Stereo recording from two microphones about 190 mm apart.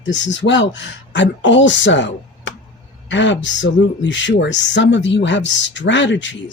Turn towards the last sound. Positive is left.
turn(degrees=75)  # may be behind; listen again after turning